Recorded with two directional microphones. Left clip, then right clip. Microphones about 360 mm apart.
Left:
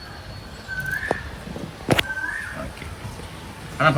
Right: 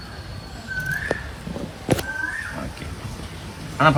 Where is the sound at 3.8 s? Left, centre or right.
Centre.